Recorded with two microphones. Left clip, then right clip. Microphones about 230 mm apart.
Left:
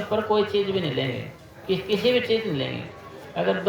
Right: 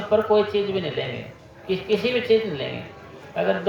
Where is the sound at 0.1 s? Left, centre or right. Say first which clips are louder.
Right 4 dB; left.